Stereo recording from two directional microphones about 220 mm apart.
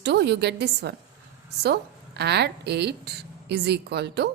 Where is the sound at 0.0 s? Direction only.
50° right (ahead or behind).